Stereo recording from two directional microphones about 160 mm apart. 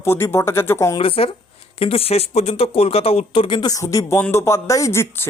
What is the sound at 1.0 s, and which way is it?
A man's voice, 35° left (ahead or behind).